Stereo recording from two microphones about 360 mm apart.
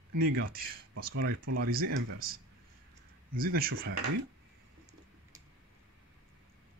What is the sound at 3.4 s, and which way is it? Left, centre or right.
Speech, right.